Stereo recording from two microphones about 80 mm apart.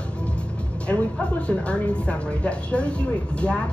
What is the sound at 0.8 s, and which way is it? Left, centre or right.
Speech, centre.